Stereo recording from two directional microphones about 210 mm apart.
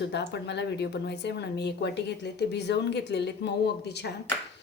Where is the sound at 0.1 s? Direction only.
55° left (ahead or behind).